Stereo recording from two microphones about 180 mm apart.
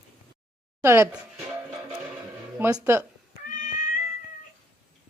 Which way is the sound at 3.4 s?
50° left (ahead or behind).